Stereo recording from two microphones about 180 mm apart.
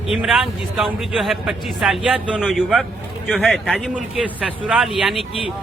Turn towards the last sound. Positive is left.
turn(degrees=0)  # may be behind; listen again after turning